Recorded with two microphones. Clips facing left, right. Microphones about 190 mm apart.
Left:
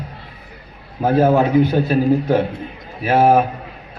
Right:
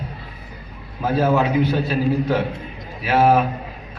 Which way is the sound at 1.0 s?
50° left (ahead or behind).